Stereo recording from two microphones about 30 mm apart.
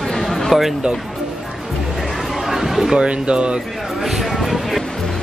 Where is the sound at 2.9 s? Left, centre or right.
Right.